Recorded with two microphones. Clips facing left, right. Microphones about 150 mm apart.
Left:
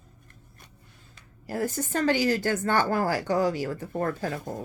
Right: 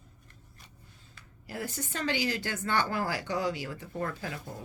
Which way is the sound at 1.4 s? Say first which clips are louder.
Left 8 dB; 45° left (ahead or behind).